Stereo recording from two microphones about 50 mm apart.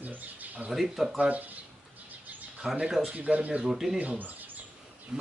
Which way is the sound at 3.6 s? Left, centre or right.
Centre.